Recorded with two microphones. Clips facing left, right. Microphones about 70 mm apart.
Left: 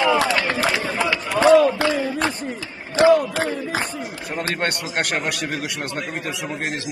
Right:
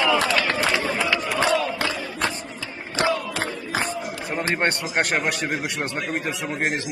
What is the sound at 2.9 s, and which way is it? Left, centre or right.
Crowd, left.